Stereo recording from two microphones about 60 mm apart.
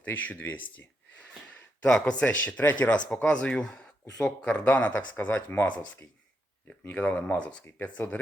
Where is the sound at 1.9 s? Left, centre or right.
Centre.